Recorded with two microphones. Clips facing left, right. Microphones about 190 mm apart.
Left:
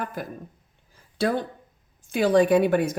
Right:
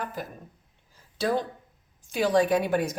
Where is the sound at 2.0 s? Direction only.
55° left (ahead or behind).